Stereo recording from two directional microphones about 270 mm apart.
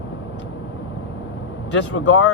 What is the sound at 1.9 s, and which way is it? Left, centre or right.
Speech, left.